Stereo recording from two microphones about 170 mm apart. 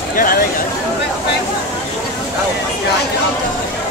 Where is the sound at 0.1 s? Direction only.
55° left (ahead or behind).